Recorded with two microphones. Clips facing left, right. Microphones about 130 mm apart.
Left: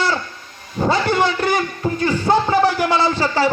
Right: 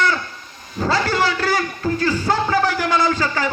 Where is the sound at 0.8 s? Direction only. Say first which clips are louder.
Left 2 dB; 20° left (ahead or behind).